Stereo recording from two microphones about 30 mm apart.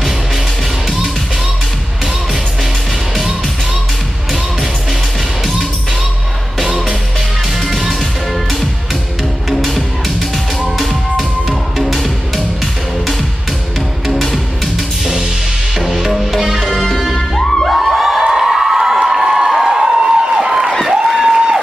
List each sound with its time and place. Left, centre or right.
9.5 s music: centre
15.8 s music: centre
17.4 s music: centre
17.7 s a sound: centre
18.4 s crowd: centre
19.3 s a sound: centre